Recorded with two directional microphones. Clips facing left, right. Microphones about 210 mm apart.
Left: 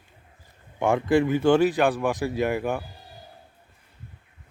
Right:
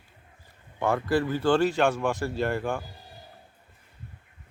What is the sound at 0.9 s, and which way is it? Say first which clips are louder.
Speech: left 5 dB; 15° left (ahead or behind).